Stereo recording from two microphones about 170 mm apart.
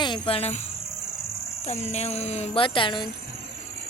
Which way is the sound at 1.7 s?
40° left (ahead or behind).